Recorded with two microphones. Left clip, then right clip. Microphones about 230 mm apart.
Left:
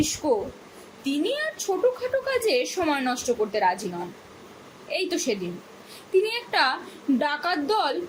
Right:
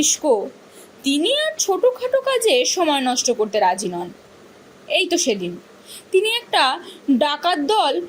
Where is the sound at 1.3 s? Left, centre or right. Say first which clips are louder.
Right 9 dB; right.